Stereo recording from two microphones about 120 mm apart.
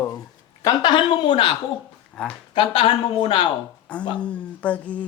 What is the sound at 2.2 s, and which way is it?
Speech, 5° left (ahead or behind).